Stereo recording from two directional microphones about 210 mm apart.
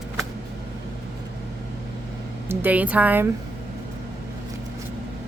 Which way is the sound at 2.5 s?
10° right (ahead or behind).